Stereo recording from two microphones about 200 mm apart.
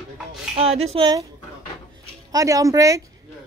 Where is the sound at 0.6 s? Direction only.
30° right (ahead or behind).